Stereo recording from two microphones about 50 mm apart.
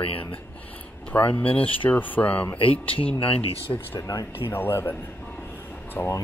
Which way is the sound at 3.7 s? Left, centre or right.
Left.